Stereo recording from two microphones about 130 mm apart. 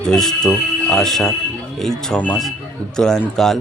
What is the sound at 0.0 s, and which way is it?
Speech, 5° left (ahead or behind).